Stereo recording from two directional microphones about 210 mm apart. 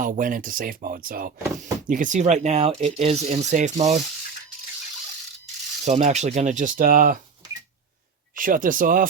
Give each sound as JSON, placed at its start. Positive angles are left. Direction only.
{"t": 0.0, "sound": "speech", "side_deg": -40}
{"t": 5.8, "sound": "speech", "side_deg": -35}
{"t": 8.4, "sound": "speech", "side_deg": -40}